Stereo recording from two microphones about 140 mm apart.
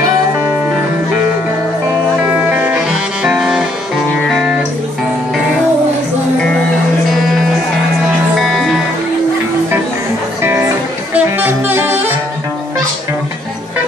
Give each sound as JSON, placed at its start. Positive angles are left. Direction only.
{"t": 2.5, "sound": "music", "side_deg": -10}
{"t": 8.4, "sound": "music", "side_deg": 0}
{"t": 11.1, "sound": "music", "side_deg": -15}